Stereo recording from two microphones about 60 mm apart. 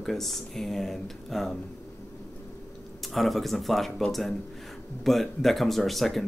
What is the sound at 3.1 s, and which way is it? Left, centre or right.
Speech, centre.